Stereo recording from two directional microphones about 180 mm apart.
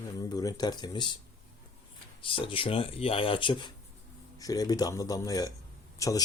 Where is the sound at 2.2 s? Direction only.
30° left (ahead or behind).